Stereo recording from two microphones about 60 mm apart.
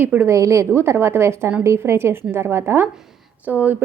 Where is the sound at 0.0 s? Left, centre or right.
Right.